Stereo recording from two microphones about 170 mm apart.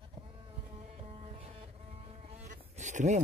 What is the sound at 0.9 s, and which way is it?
Vehicle, 35° right (ahead or behind).